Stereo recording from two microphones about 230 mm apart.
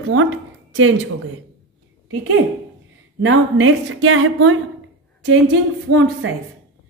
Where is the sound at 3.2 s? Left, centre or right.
Right.